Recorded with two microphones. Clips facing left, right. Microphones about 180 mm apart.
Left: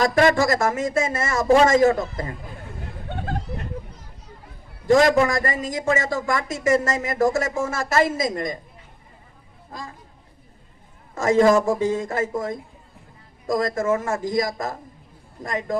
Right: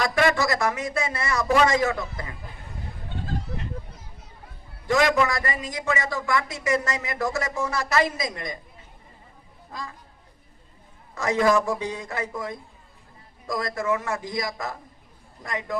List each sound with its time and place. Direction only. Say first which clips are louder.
0.0 s speech: left 5 dB; 45° left (ahead or behind)
3.1 s a sound: left 4 dB; 65° left (ahead or behind)
4.9 s speech: left 5 dB; 45° left (ahead or behind)
11.1 s speech: left 5 dB; 45° left (ahead or behind)
13.5 s speech: left 5 dB; 45° left (ahead or behind)